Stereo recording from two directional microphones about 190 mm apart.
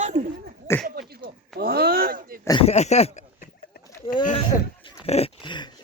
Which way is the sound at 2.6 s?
35° left (ahead or behind).